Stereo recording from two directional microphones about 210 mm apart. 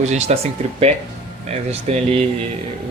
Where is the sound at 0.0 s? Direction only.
35° right (ahead or behind).